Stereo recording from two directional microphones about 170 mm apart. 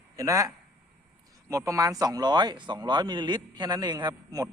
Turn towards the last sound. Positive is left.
turn(degrees=-20)  # may be behind; listen again after turning